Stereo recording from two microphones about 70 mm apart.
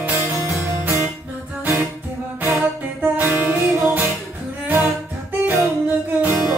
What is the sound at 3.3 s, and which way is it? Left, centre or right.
Music, centre.